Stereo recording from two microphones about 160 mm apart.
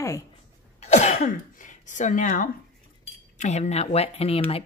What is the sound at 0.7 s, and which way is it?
Speech, 45° left (ahead or behind).